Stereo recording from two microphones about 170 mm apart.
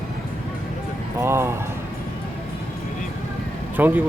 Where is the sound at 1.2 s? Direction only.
15° right (ahead or behind).